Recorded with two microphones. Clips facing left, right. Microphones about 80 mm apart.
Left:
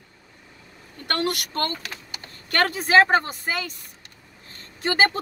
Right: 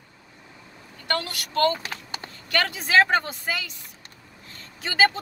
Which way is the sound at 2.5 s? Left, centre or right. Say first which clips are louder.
Left 3 dB; left.